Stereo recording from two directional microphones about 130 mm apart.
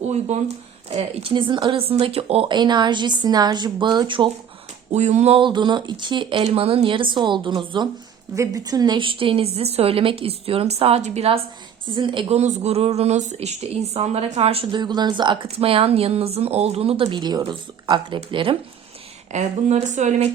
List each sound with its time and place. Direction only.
0.0 s speech: 60° right (ahead or behind); by 4.3 s 40° right (ahead or behind)
4.9 s speech: 60° right (ahead or behind)
5.4 s speech: 35° right (ahead or behind)
8.4 s a woman's voice: 25° right (ahead or behind); by 11.3 s 55° right (ahead or behind)
11.9 s speech: 35° right (ahead or behind)
12.3 s speech: 60° right (ahead or behind)
14.7 s speech: 35° right (ahead or behind)
19.3 s speech: 60° right (ahead or behind)